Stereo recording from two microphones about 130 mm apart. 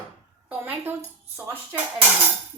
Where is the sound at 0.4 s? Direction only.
15° right (ahead or behind).